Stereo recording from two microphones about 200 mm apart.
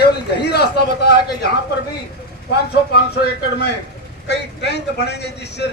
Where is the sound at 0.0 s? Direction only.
55° left (ahead or behind).